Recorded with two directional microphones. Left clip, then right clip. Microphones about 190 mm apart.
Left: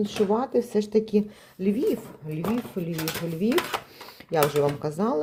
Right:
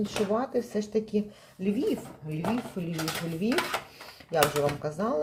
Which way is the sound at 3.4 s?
50° left (ahead or behind).